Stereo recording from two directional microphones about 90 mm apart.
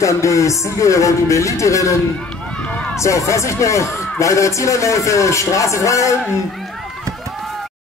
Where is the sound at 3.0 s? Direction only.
35° left (ahead or behind).